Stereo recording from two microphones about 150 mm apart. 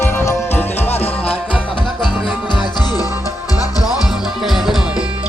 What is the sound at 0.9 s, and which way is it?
Music, 45° left (ahead or behind).